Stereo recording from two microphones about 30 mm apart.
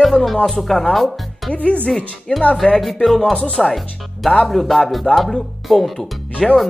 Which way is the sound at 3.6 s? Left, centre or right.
Centre.